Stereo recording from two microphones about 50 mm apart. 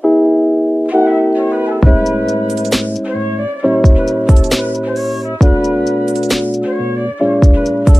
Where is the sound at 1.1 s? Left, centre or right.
Right.